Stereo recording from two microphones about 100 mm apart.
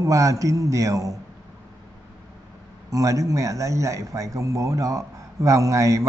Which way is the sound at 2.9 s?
35° right (ahead or behind).